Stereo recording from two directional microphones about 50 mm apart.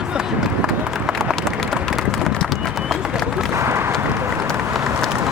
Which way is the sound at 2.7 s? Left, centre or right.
Centre.